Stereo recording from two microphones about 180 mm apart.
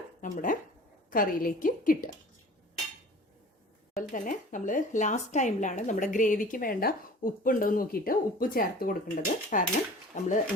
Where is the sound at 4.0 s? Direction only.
45° left (ahead or behind).